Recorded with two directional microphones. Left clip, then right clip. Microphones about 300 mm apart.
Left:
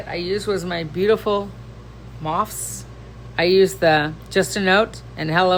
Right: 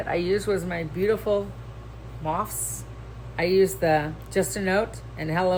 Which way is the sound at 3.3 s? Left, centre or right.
Centre.